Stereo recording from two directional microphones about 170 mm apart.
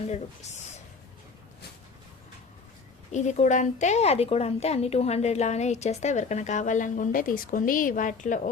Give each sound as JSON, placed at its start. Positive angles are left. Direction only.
{"t": 3.1, "sound": "a woman's voice", "side_deg": 45}